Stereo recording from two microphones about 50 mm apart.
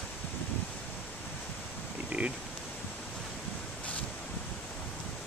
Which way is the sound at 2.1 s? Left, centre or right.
Right.